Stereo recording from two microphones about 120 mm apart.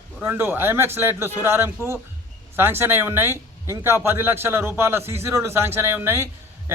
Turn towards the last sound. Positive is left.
turn(degrees=-20)  # may be behind; listen again after turning